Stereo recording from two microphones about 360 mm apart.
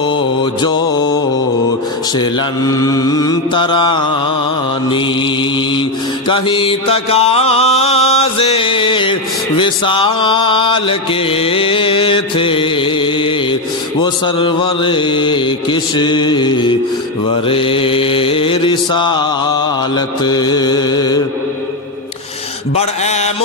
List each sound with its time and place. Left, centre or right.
0.4 s mantra: centre
6.2 s mantra: centre
20.2 s mantra: centre
22.8 s mantra: centre